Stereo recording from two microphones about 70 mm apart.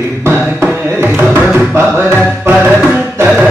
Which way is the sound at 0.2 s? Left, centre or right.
Right.